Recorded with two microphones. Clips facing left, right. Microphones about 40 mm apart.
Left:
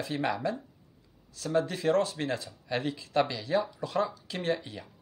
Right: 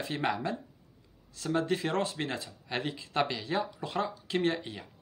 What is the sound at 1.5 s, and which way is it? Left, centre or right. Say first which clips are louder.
Speech: left 4 dB; right.